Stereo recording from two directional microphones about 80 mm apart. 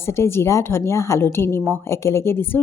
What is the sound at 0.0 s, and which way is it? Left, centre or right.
Speech, left.